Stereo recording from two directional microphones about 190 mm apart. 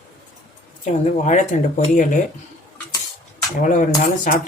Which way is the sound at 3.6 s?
40° left (ahead or behind).